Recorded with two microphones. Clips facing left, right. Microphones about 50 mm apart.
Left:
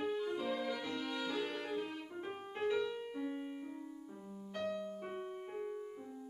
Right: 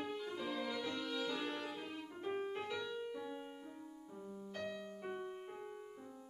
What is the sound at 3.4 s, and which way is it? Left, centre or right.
Piano, centre.